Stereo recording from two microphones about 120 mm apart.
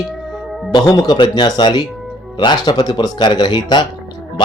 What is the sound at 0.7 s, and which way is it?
Speech, 35° left (ahead or behind).